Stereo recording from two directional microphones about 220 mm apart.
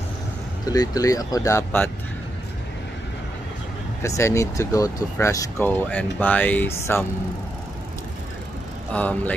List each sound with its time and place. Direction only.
0.7 s speech: 15° left (ahead or behind)
4.2 s speech: 15° left (ahead or behind)
8.9 s speech: 5° left (ahead or behind)